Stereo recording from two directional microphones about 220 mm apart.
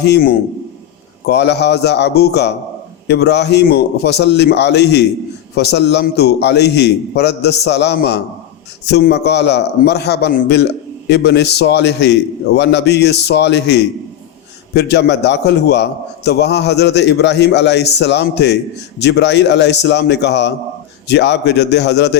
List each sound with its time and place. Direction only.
0.0 s a man's voice: 45° left (ahead or behind)